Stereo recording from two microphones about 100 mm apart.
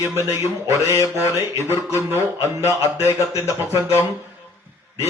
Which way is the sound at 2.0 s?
25° right (ahead or behind).